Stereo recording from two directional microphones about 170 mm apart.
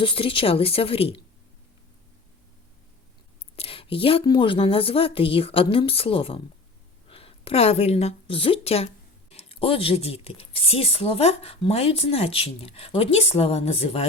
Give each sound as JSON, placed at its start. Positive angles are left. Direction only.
{"t": 0.0, "sound": "a woman's voice", "side_deg": 30}
{"t": 3.5, "sound": "a woman's voice", "side_deg": 35}